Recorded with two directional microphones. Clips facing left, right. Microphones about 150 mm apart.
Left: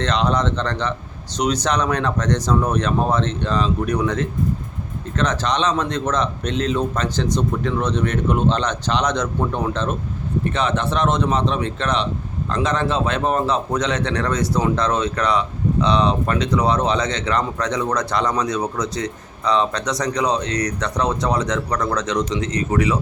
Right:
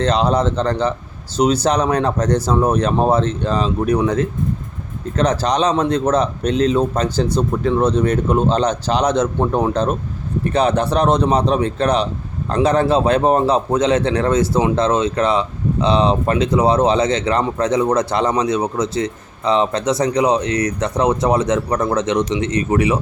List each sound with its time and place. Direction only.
0.0 s a man's voice: 35° right (ahead or behind)